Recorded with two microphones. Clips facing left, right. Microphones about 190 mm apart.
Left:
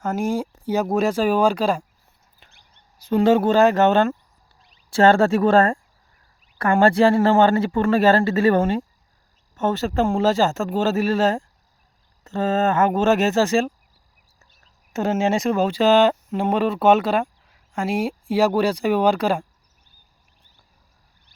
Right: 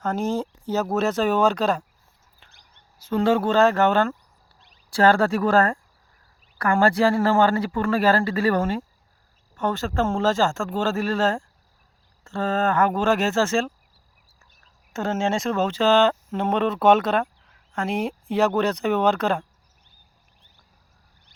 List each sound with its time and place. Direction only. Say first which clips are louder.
0.0 s speech: left 2 dB; 10° left (ahead or behind)
3.0 s speech: left 4 dB; 15° left (ahead or behind)
14.9 s speech: left 3 dB; 15° left (ahead or behind)